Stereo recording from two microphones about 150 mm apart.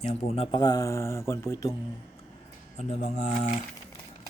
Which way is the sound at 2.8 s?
50° left (ahead or behind).